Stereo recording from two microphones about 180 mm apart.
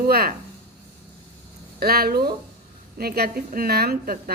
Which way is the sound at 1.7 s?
55° right (ahead or behind).